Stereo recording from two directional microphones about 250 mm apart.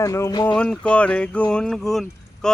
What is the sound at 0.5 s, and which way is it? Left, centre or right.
Speech, centre.